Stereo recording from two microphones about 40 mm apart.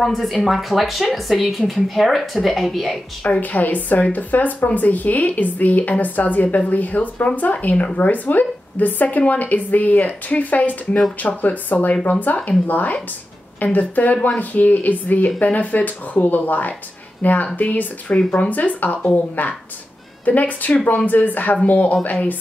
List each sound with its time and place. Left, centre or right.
0.0 s a woman's voice: centre
3.3 s speech: left
8.0 s speech: left
20.2 s speech: left